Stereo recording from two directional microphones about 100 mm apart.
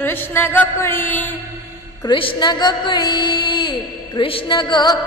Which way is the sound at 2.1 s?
50° left (ahead or behind).